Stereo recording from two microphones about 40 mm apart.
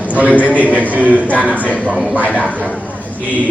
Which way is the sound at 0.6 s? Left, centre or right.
Right.